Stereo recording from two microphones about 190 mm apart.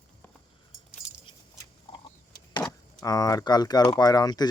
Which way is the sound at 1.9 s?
30° left (ahead or behind).